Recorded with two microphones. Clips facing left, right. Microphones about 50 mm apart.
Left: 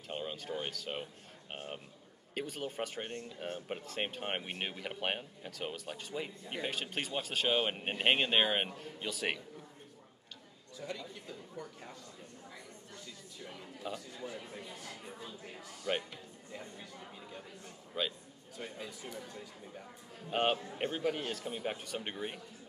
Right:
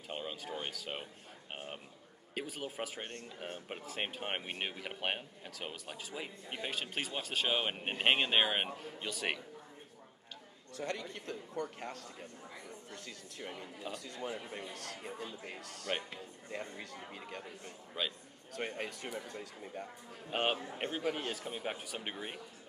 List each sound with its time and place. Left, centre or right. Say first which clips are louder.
0.1 s speech: left 2 dB; centre
10.8 s a man's voice: right 3 dB; right
15.9 s speech: left 3 dB; centre
16.4 s speech: right 5 dB; right
17.9 s speech: left 2 dB; centre
18.5 s a man's voice: right 5 dB; right
20.2 s speech: left 2 dB; centre